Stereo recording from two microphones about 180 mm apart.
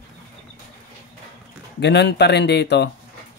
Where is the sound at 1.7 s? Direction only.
70° left (ahead or behind).